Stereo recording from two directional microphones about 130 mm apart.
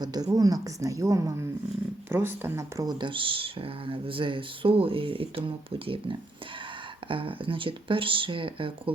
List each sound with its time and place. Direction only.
0.0 s a woman's voice: 30° right (ahead or behind)
3.0 s speech: 40° right (ahead or behind)